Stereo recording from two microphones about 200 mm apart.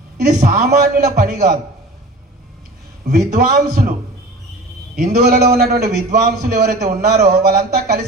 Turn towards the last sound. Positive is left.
turn(degrees=-50)  # may be behind; listen again after turning